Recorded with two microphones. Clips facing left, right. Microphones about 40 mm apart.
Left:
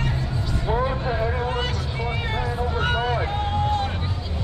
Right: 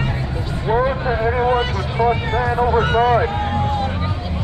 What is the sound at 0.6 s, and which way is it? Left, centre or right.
Vehicle, right.